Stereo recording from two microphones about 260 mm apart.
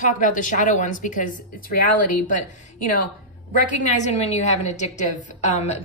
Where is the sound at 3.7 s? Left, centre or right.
Left.